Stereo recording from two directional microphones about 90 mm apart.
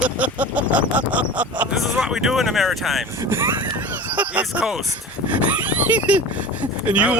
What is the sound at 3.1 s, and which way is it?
Speech, 25° right (ahead or behind).